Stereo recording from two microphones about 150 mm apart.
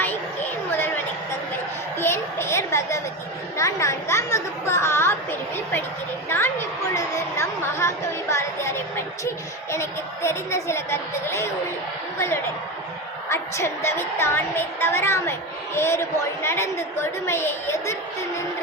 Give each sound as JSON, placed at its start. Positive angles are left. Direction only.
{"t": 2.0, "sound": "a sound", "side_deg": 15}
{"t": 3.6, "sound": "speech", "side_deg": 20}
{"t": 6.2, "sound": "a woman's voice", "side_deg": 15}
{"t": 13.2, "sound": "a woman's voice", "side_deg": 15}